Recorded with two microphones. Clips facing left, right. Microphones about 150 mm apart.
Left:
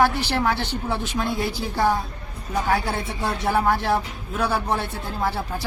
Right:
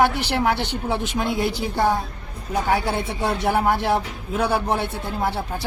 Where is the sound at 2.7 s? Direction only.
15° right (ahead or behind).